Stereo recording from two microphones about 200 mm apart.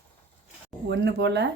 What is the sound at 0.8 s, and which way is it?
Speech, 60° right (ahead or behind).